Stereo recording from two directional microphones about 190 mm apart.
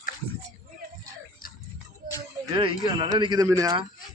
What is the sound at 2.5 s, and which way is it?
Speech, 25° right (ahead or behind).